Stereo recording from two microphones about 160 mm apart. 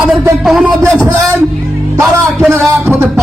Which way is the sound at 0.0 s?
5° right (ahead or behind).